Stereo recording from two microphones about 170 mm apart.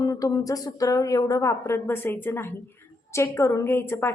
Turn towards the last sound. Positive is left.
turn(degrees=15)  # may be behind; listen again after turning